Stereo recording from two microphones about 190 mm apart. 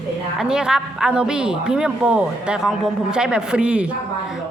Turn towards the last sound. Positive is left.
turn(degrees=-5)  # may be behind; listen again after turning